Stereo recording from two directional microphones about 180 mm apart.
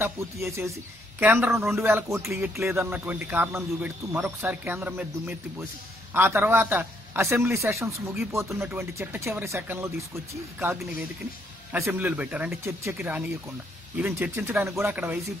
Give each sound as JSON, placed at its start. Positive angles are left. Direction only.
{"t": 0.0, "sound": "speech", "side_deg": -15}